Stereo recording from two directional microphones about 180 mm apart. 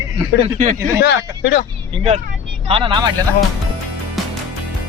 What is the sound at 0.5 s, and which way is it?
Speech, 40° right (ahead or behind).